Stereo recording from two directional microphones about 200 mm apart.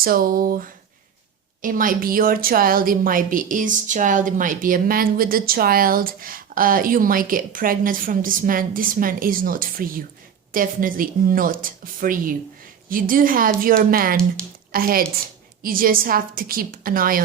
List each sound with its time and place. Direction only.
0.0 s a woman's voice: 45° right (ahead or behind)